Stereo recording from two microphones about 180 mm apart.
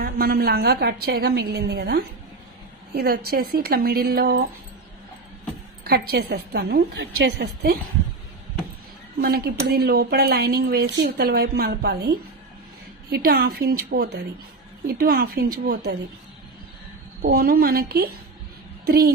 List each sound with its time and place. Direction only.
0.0 s a woman's voice: 55° right (ahead or behind)
5.9 s a woman's voice: 60° right (ahead or behind)
9.2 s a woman's voice: 60° right (ahead or behind)
17.2 s a woman's voice: 55° right (ahead or behind)